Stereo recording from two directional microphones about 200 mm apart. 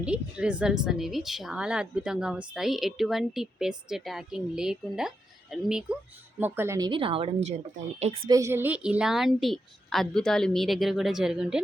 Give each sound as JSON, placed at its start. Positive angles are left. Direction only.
{"t": 0.0, "sound": "a woman's voice", "side_deg": -5}
{"t": 8.3, "sound": "speech", "side_deg": -15}